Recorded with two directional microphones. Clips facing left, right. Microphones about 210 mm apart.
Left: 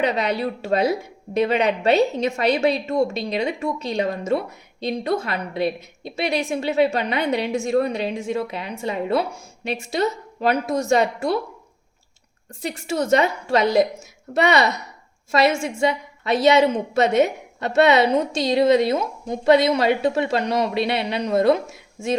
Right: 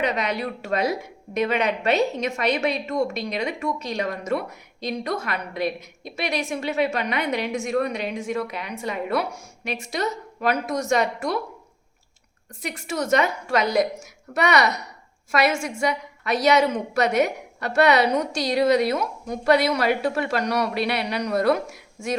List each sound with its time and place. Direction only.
0.0 s a woman's voice: 30° left (ahead or behind)
12.6 s a woman's voice: 30° left (ahead or behind)